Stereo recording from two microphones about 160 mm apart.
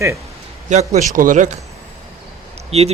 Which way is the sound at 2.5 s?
40° right (ahead or behind).